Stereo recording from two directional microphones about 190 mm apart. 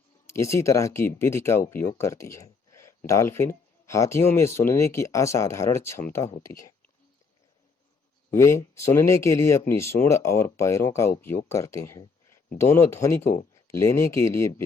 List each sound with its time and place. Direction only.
0.3 s speech: 15° left (ahead or behind)
8.3 s speech: 15° left (ahead or behind)